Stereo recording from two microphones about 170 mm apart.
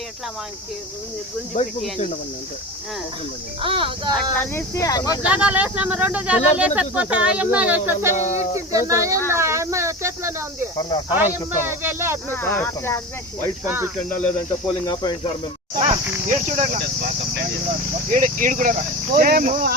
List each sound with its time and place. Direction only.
1.5 s speech: 50° left (ahead or behind)
3.6 s a sound: 30° right (ahead or behind)
4.4 s speech: 15° left (ahead or behind)
5.2 s speech: 5° right (ahead or behind)
8.1 s speech: 45° left (ahead or behind)
8.5 s speech: 20° right (ahead or behind)
10.8 s speech: 25° left (ahead or behind)
11.1 s speech: 10° right (ahead or behind)
12.3 s speech: 15° left (ahead or behind)
13.7 s speech: 15° right (ahead or behind)
14.8 s speech: 25° left (ahead or behind)
16.2 s speech: 50° right (ahead or behind)
18.1 s speech: 50° right (ahead or behind)